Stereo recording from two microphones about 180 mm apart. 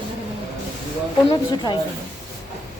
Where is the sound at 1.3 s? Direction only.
25° left (ahead or behind).